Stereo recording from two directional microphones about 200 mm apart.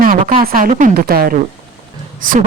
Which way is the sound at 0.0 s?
45° right (ahead or behind).